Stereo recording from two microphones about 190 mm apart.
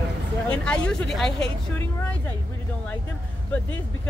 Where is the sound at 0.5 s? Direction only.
5° left (ahead or behind).